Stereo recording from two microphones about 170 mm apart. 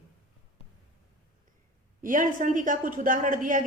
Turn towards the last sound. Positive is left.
turn(degrees=-50)  # may be behind; listen again after turning